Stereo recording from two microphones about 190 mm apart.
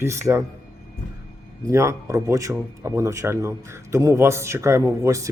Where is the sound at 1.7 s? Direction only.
15° right (ahead or behind).